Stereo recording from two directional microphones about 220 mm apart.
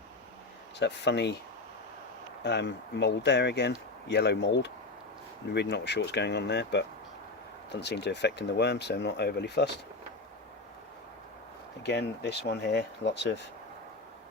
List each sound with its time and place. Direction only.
0.8 s speech: 50° left (ahead or behind)
2.4 s speech: 50° left (ahead or behind)
11.9 s speech: 50° left (ahead or behind)